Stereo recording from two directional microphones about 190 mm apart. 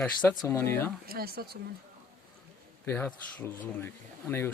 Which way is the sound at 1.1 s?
55° right (ahead or behind).